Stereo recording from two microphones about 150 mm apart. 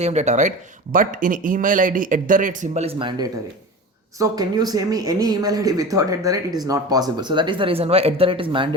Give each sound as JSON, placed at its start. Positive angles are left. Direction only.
{"t": 0.0, "sound": "speech", "side_deg": -50}
{"t": 0.9, "sound": "speech", "side_deg": -65}
{"t": 3.0, "sound": "speech", "side_deg": -30}